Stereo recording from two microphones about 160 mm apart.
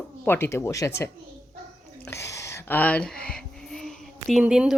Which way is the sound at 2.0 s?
15° left (ahead or behind).